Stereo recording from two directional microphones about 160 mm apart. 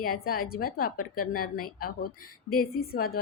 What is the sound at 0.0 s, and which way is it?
A woman's voice, 65° left (ahead or behind).